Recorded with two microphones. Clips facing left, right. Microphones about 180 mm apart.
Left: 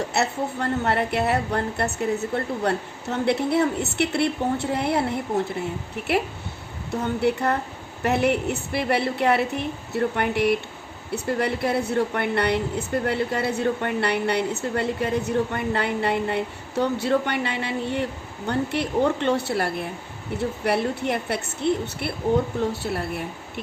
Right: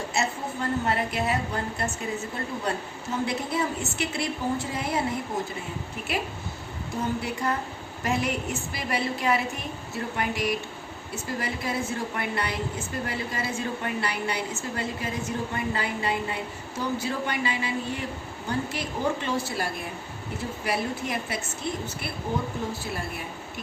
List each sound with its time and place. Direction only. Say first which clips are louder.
0.1 s a woman's voice: left 4 dB; 65° left (ahead or behind)
6.9 s a woman's voice: left 7 dB; 65° left (ahead or behind)